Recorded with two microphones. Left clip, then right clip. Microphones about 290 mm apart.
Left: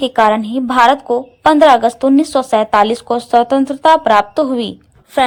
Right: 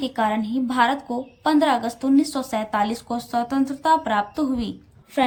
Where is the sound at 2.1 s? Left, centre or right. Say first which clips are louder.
Left 10 dB; centre.